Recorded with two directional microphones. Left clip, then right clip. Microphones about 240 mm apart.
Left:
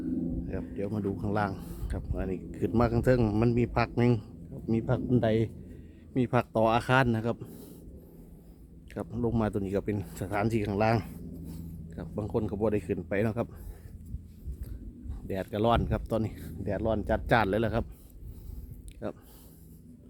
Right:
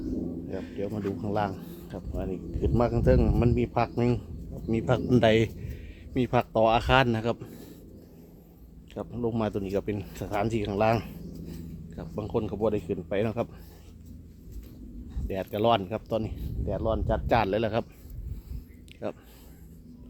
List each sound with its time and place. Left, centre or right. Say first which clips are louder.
0.4 s speech: right 2 dB; centre
4.7 s speech: right 4 dB; centre
6.1 s speech: right 3 dB; centre
9.0 s speech: right 1 dB; centre
15.3 s speech: right 3 dB; centre
19.0 s speech: right 3 dB; centre